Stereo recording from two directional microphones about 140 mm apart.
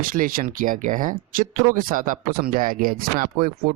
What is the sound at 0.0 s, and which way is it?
Speech, 90° right.